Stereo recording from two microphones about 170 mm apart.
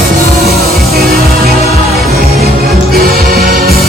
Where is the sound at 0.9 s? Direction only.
60° right (ahead or behind).